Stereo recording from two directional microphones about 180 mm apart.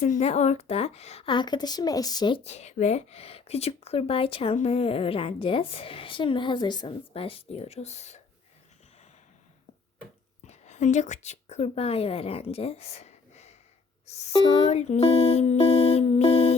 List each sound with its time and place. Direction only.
0.0 s a woman's voice: 35° left (ahead or behind)
10.4 s a woman's voice: 40° left (ahead or behind)
14.7 s music: 40° left (ahead or behind)